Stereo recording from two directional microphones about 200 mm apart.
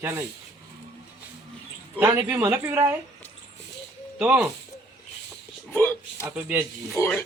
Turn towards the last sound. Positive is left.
turn(degrees=10)  # may be behind; listen again after turning